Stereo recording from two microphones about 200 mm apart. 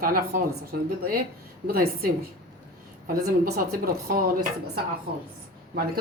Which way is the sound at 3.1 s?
50° right (ahead or behind).